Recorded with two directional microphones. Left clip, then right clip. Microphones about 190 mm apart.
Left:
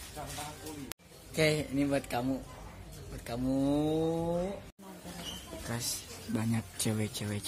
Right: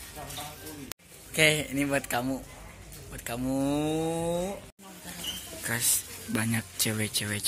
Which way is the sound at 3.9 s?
30° right (ahead or behind).